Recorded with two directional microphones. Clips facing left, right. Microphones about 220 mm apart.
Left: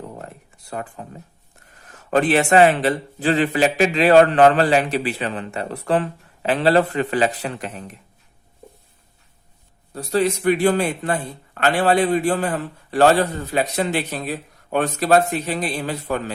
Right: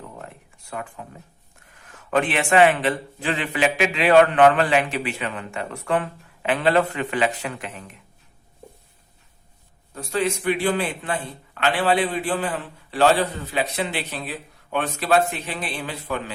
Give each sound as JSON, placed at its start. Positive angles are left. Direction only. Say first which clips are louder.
{"t": 0.2, "sound": "a sound", "louder": "left 3 dB", "side_deg": 35}
{"t": 1.7, "sound": "a man's voice", "louder": "left 3 dB", "side_deg": 40}
{"t": 9.9, "sound": "a man's voice", "louder": "left 4 dB", "side_deg": 35}